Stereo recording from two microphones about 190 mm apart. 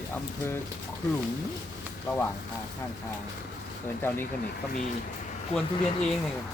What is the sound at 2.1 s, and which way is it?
Speech, 10° left (ahead or behind).